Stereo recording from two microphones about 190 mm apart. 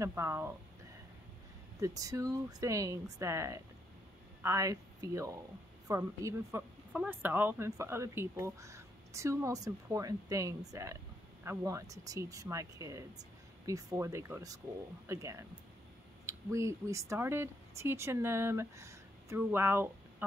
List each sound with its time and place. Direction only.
0.0 s a woman's voice: 15° right (ahead or behind)
1.8 s a woman's voice: 15° right (ahead or behind)